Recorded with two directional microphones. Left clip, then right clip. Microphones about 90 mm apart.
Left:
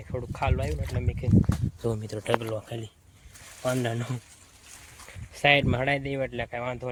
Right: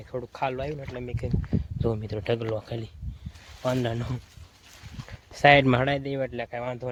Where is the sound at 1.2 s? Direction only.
50° right (ahead or behind).